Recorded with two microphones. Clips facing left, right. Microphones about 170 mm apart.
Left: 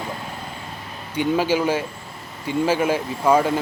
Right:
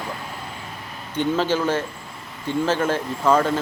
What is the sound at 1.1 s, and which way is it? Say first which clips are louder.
Speech: left 1 dB; 10° left (ahead or behind).